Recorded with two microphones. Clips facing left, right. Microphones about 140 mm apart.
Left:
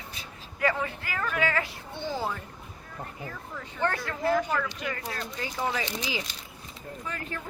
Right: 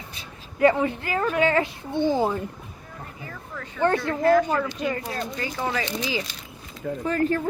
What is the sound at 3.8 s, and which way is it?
Speech, 25° right (ahead or behind).